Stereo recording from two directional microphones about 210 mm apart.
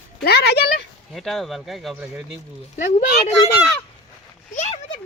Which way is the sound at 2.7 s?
35° left (ahead or behind).